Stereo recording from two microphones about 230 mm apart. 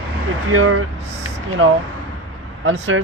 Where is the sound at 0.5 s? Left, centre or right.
Right.